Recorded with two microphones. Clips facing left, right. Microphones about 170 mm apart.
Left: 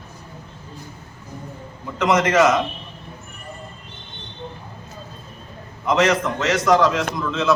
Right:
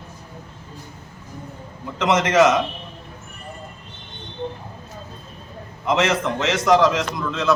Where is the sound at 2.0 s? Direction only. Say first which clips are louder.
Even; 25° right (ahead or behind).